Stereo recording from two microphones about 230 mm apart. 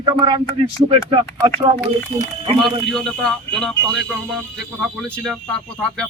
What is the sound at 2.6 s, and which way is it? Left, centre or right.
Speech, centre.